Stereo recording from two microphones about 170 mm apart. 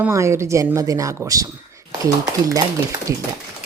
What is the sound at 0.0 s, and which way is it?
Speech, 15° right (ahead or behind).